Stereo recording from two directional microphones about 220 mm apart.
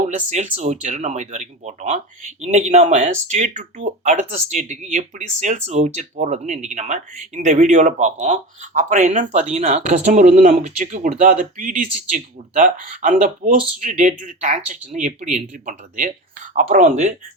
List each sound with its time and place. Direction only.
0.1 s speech: 30° right (ahead or behind)